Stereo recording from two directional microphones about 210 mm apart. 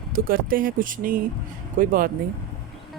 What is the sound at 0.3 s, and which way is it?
Speech, 40° right (ahead or behind).